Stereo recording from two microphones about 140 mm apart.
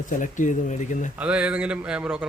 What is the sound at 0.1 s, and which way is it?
Speech, 65° left (ahead or behind).